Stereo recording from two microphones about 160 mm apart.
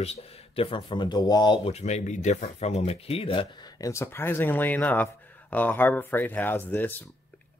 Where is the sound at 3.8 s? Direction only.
15° left (ahead or behind).